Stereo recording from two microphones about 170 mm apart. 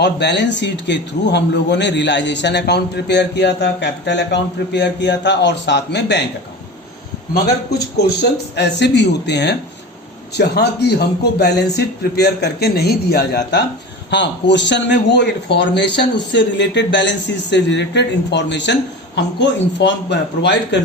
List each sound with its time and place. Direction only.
0.0 s speech: 90° left
7.7 s speech: 75° left (ahead or behind)
10.3 s a man's voice: 75° left (ahead or behind)
14.1 s speech: 90° left